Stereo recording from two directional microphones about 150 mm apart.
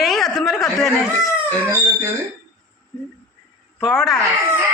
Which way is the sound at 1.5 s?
15° right (ahead or behind).